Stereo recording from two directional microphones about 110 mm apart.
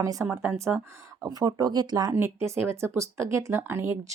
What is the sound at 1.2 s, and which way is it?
Speech, 35° right (ahead or behind).